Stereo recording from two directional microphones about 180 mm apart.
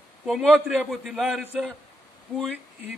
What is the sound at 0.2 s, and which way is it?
A man's voice, centre (ahead or behind).